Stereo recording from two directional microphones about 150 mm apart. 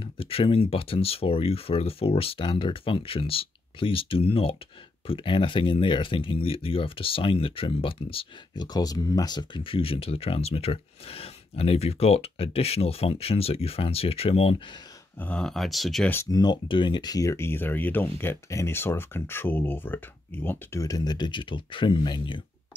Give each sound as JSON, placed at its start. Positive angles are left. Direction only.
{"t": 0.0, "sound": "speech", "side_deg": 40}
{"t": 15.1, "sound": "speech", "side_deg": 10}
{"t": 16.1, "sound": "speech", "side_deg": 15}
{"t": 16.3, "sound": "speech", "side_deg": 30}